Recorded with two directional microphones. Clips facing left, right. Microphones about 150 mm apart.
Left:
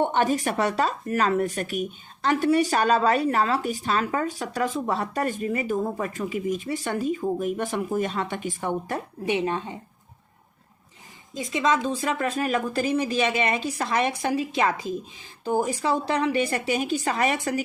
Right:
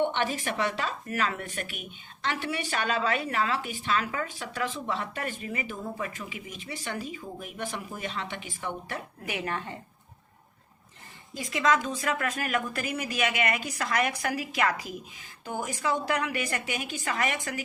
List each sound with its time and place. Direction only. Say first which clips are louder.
0.0 s a woman's voice: left 5 dB; 45° left (ahead or behind)
9.2 s speech: left 9 dB; 25° left (ahead or behind)
11.3 s a woman's voice: left 2 dB; 25° left (ahead or behind)